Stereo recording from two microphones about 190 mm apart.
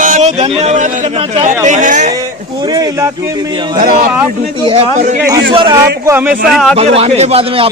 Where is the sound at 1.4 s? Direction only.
40° right (ahead or behind).